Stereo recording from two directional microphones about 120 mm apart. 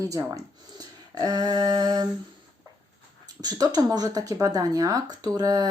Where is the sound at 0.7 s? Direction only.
30° right (ahead or behind).